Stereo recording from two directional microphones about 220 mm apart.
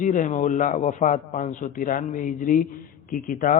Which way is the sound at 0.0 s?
35° left (ahead or behind).